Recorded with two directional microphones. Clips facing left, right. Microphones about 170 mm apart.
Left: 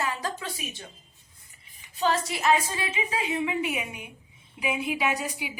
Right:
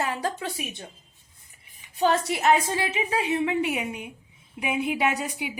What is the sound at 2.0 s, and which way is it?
A woman's voice, 55° right (ahead or behind).